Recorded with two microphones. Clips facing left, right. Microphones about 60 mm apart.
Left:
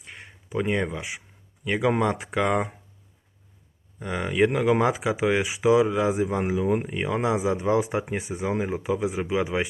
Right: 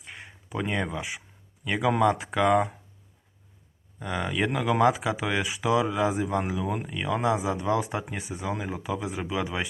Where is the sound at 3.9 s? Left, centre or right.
Centre.